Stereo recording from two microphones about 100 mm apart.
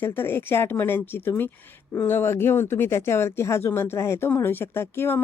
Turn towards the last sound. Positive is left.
turn(degrees=25)  # may be behind; listen again after turning